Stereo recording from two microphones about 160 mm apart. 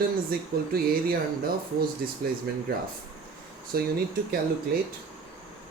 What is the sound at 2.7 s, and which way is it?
Speech, 75° right (ahead or behind).